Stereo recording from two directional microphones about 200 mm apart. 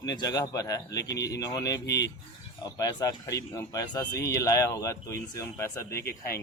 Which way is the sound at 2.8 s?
20° left (ahead or behind).